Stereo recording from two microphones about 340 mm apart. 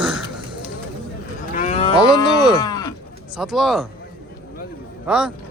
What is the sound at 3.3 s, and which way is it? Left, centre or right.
Speech, centre.